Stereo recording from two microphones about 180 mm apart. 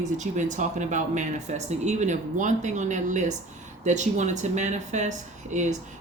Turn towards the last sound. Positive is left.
turn(degrees=-40)  # may be behind; listen again after turning